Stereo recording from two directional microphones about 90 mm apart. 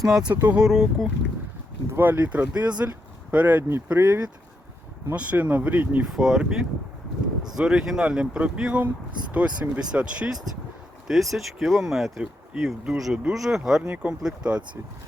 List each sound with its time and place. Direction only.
0.0 s speech: 5° right (ahead or behind)
0.3 s speech: 40° right (ahead or behind)
0.5 s speech: 5° right (ahead or behind)
1.9 s speech: 25° right (ahead or behind)
6.1 s speech: 5° right (ahead or behind)